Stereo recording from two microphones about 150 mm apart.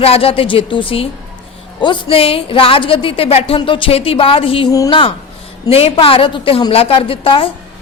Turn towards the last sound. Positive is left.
turn(degrees=35)  # may be behind; listen again after turning